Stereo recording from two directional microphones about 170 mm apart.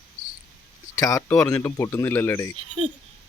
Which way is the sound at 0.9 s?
20° left (ahead or behind).